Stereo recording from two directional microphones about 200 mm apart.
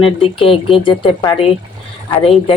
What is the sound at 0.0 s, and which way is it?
Speech, 25° left (ahead or behind).